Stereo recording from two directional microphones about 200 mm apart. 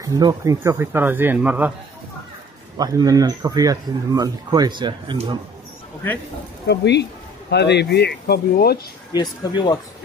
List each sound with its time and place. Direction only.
0.0 s speech: 15° right (ahead or behind)
2.8 s speech: 20° right (ahead or behind)
6.7 s speech: 60° left (ahead or behind)
9.1 s speech: 20° left (ahead or behind)